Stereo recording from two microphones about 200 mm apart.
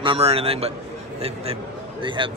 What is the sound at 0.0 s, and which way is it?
Speech, 25° right (ahead or behind).